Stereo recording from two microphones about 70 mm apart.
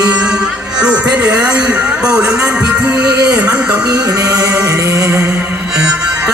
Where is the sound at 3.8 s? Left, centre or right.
Right.